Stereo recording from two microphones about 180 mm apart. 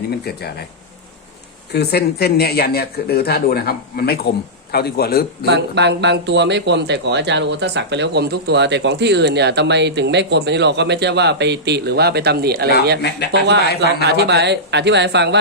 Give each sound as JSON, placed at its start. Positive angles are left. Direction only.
{"t": 0.1, "sound": "speech", "side_deg": 60}
{"t": 1.7, "sound": "speech", "side_deg": 65}
{"t": 5.5, "sound": "speech", "side_deg": -70}
{"t": 13.0, "sound": "speech", "side_deg": 65}
{"t": 14.0, "sound": "speech", "side_deg": -70}